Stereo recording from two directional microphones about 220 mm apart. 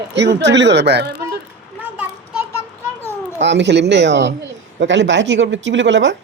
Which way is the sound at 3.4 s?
55° right (ahead or behind).